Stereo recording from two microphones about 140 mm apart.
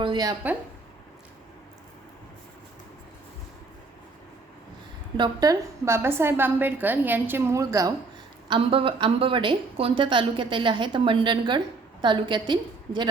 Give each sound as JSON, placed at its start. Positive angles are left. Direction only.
{"t": 0.0, "sound": "a woman's voice", "side_deg": -30}
{"t": 5.1, "sound": "a woman's voice", "side_deg": -30}
{"t": 8.4, "sound": "a woman's voice", "side_deg": -40}